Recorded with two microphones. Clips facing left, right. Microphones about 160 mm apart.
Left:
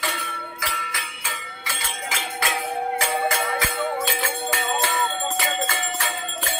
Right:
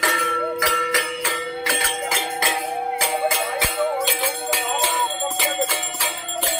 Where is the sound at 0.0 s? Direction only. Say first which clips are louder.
Right 8 dB; 80° right.